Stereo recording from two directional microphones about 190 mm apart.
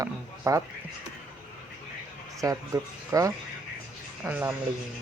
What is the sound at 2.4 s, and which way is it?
Speech, 15° right (ahead or behind).